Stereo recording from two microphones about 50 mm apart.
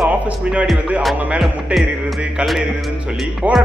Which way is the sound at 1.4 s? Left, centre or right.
Centre.